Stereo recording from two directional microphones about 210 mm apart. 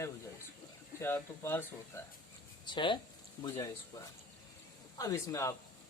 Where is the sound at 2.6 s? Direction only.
20° left (ahead or behind).